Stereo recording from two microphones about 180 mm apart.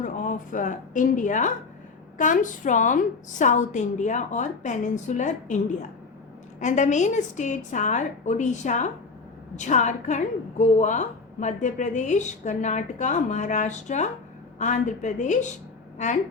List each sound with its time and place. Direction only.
0.0 s a woman's voice: 45° left (ahead or behind)
6.6 s a woman's voice: 40° left (ahead or behind)